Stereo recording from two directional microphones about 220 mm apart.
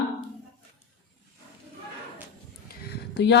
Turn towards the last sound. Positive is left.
turn(degrees=50)  # may be behind; listen again after turning